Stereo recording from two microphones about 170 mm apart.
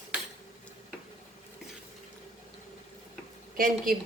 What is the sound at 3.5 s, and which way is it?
Speech, 55° right (ahead or behind).